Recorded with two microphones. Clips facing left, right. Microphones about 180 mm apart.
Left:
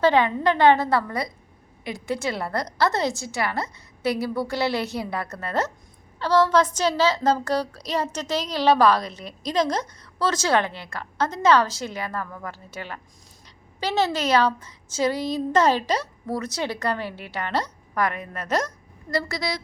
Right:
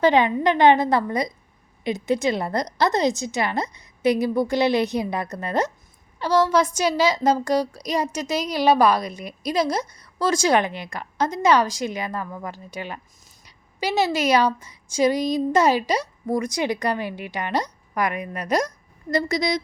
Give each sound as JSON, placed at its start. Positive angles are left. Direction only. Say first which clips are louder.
{"t": 0.0, "sound": "a woman's voice", "louder": "right 2 dB", "side_deg": -15}